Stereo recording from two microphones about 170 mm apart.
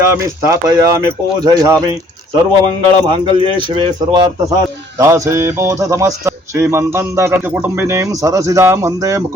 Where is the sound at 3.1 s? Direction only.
30° right (ahead or behind).